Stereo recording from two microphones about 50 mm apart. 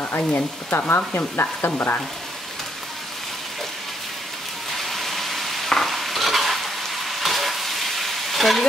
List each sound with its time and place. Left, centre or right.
0.3 s stir: left
4.7 s stir: centre